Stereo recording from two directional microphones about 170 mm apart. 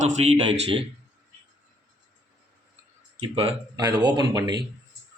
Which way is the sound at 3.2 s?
30° right (ahead or behind).